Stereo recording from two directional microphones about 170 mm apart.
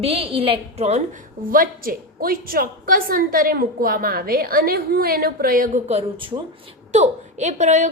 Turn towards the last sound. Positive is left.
turn(degrees=-45)  # may be behind; listen again after turning